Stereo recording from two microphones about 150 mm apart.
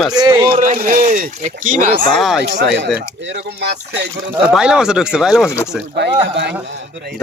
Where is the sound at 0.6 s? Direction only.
65° right (ahead or behind).